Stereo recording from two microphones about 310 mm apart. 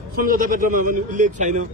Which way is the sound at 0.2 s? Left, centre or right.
Right.